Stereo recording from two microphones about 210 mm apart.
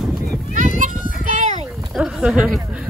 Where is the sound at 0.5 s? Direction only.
40° right (ahead or behind).